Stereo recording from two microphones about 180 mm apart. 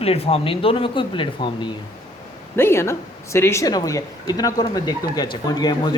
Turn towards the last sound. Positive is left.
turn(degrees=25)  # may be behind; listen again after turning